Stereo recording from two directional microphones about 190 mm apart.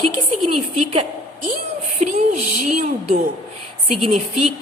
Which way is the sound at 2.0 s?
40° right (ahead or behind).